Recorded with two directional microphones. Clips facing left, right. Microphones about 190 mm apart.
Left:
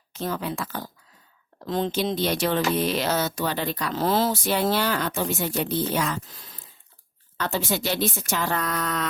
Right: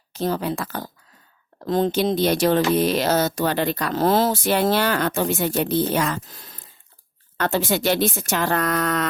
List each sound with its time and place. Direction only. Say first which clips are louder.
0.1 s speech: right 5 dB; 35° right (ahead or behind)
7.3 s a woman's voice: right 5 dB; 85° right
8.0 s speech: right 4 dB; 50° right (ahead or behind)